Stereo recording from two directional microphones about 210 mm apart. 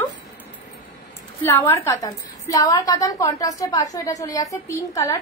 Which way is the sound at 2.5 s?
15° left (ahead or behind).